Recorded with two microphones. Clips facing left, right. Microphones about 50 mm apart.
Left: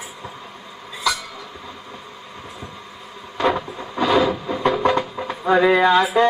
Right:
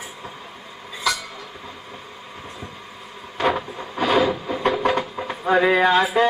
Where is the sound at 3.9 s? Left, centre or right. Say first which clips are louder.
Left 2 dB; centre.